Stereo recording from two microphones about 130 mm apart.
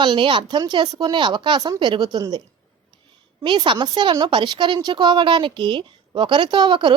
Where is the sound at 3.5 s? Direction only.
40° right (ahead or behind).